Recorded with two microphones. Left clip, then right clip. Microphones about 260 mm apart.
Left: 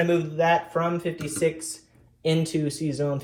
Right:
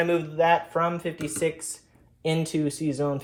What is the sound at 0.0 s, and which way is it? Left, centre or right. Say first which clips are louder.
Speech: even; right.